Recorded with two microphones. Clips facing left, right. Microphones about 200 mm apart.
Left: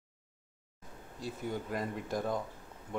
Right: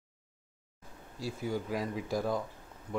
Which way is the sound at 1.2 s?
5° right (ahead or behind).